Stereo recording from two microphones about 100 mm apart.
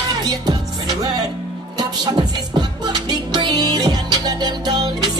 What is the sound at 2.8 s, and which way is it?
Music, 45° right (ahead or behind).